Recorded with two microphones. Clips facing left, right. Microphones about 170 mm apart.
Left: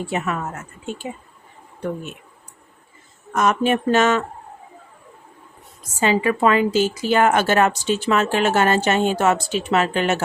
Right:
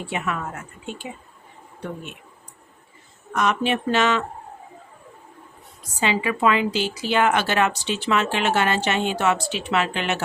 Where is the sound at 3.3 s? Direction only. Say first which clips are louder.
Left 4 dB; 45° left (ahead or behind).